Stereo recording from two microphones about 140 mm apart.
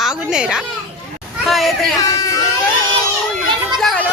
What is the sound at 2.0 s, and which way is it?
Speech, 25° left (ahead or behind).